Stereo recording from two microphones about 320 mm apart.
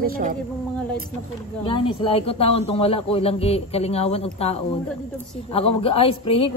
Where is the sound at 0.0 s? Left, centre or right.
Right.